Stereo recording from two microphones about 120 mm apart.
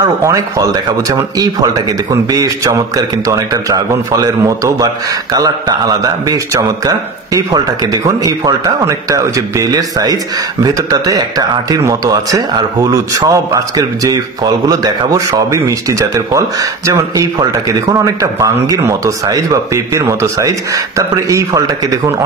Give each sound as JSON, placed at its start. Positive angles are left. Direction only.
{"t": 0.2, "sound": "a man's voice", "side_deg": -25}
{"t": 2.3, "sound": "a man's voice", "side_deg": -30}